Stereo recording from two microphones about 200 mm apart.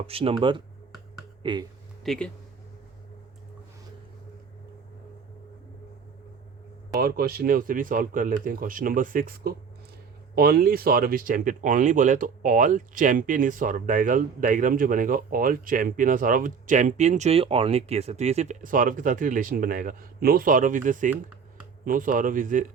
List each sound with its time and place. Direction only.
0.1 s speech: 30° right (ahead or behind)
2.0 s speech: 5° left (ahead or behind)
7.0 s speech: 50° right (ahead or behind)